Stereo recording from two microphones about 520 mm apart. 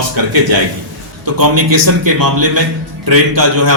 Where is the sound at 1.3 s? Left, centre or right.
Right.